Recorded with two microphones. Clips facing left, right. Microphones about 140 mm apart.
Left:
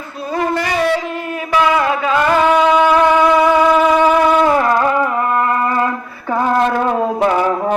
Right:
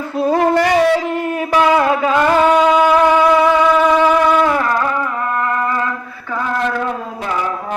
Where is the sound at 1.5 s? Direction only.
35° right (ahead or behind).